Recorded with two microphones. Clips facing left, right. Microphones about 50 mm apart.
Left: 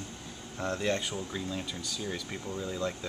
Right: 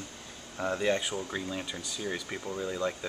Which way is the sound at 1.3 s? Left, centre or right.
Centre.